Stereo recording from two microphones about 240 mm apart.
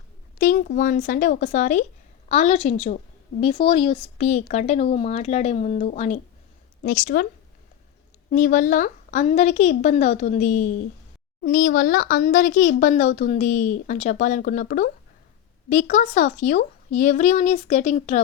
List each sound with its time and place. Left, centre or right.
0.3 s speech: left
8.3 s speech: left